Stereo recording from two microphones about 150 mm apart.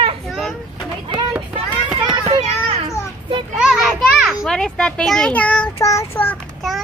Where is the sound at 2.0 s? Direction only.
35° right (ahead or behind).